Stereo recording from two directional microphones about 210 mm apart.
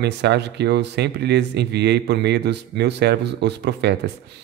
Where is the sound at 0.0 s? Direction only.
55° right (ahead or behind).